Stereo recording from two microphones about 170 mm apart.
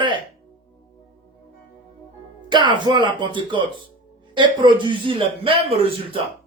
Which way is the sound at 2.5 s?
25° right (ahead or behind).